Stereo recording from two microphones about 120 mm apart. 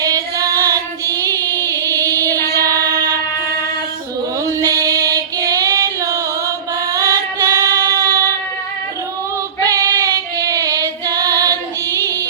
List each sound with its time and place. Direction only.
0.0 s child singing: 30° right (ahead or behind)
2.6 s a sound: 30° right (ahead or behind)
4.6 s female singing: 30° right (ahead or behind)
9.6 s female singing: 30° right (ahead or behind)